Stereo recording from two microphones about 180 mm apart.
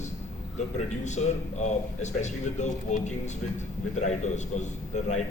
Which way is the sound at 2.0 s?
40° left (ahead or behind).